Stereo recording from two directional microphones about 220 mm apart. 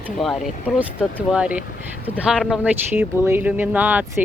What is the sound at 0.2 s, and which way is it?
Speech, centre (ahead or behind).